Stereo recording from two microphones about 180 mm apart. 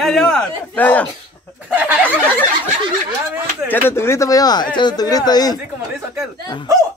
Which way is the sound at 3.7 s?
15° left (ahead or behind).